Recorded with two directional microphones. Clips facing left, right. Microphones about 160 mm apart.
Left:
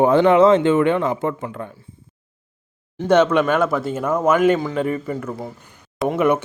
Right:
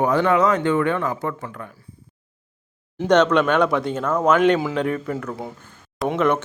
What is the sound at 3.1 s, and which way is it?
Speech, 5° left (ahead or behind).